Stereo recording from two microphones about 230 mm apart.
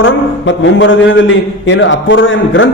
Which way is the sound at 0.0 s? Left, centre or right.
Left.